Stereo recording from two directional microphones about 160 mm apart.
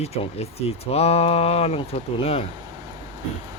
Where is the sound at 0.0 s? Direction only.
40° left (ahead or behind).